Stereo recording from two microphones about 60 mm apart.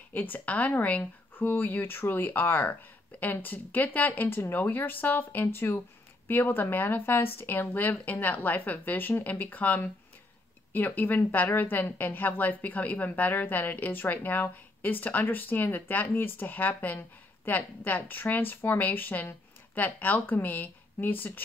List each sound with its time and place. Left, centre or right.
0.1 s a woman's voice: left